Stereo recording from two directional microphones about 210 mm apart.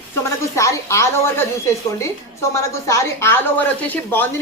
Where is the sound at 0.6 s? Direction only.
15° left (ahead or behind).